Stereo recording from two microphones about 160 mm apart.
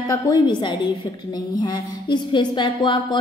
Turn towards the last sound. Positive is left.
turn(degrees=30)  # may be behind; listen again after turning